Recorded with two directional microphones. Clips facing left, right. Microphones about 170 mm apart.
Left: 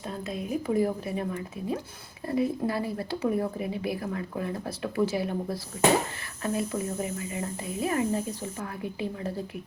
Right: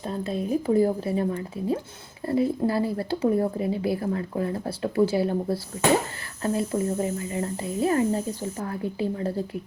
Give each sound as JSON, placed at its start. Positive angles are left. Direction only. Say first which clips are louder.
{"t": 0.3, "sound": "speech", "louder": "right 5 dB", "side_deg": -30}